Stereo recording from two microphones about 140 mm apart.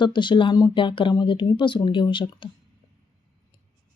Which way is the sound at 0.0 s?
35° left (ahead or behind).